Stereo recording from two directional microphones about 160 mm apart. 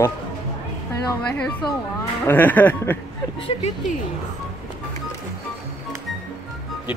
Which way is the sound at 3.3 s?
35° left (ahead or behind).